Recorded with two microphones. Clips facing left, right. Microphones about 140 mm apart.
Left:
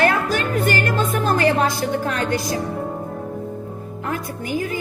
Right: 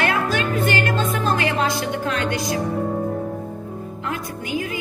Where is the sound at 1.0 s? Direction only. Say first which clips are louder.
Left 2 dB; 45° left (ahead or behind).